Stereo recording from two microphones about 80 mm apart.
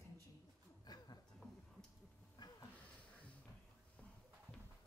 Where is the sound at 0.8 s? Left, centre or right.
Left.